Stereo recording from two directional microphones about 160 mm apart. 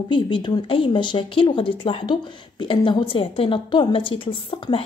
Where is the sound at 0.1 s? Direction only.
30° left (ahead or behind).